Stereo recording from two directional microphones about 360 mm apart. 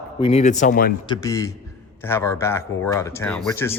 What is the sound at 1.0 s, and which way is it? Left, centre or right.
A man's voice, centre.